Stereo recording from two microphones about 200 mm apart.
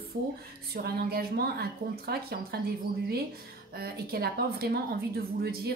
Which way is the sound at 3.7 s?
50° right (ahead or behind).